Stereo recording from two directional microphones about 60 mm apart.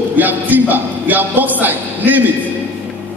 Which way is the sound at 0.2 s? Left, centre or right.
Right.